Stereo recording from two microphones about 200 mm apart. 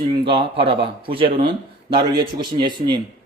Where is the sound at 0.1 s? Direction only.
25° right (ahead or behind).